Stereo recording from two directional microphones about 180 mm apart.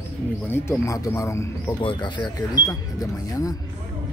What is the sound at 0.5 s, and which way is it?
Speech, 15° left (ahead or behind).